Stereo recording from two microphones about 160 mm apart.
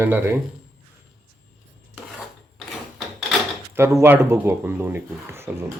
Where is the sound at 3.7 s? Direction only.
15° right (ahead or behind).